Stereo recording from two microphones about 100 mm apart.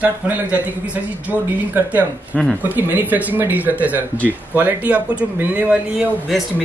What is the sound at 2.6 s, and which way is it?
Speech, 15° right (ahead or behind).